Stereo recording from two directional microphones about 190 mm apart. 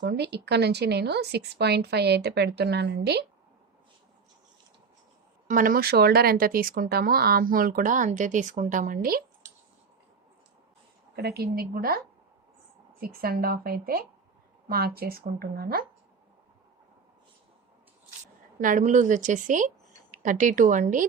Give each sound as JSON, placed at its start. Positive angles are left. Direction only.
{"t": 0.0, "sound": "speech", "side_deg": -60}
{"t": 5.5, "sound": "speech", "side_deg": -45}
{"t": 11.2, "sound": "speech", "side_deg": -55}
{"t": 13.2, "sound": "speech", "side_deg": -50}
{"t": 18.6, "sound": "speech", "side_deg": -40}